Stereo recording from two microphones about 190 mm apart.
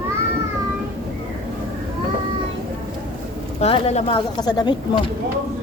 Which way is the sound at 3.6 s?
35° left (ahead or behind).